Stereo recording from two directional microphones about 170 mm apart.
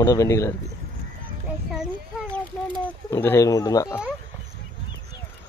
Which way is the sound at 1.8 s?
5° left (ahead or behind).